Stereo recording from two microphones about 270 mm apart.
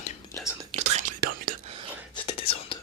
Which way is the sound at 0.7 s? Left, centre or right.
Right.